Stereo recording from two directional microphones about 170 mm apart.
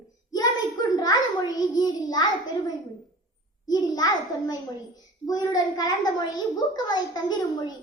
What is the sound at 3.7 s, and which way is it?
A child's voice, 25° left (ahead or behind).